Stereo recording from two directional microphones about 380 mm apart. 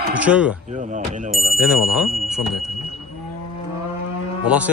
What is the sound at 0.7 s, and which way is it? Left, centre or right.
Speech, centre.